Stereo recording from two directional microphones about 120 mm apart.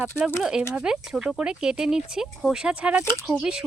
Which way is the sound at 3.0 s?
20° left (ahead or behind).